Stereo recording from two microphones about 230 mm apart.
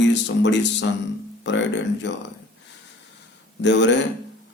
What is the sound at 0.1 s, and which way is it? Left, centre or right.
Speech, left.